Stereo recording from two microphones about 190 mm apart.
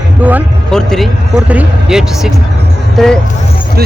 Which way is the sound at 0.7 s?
5° left (ahead or behind).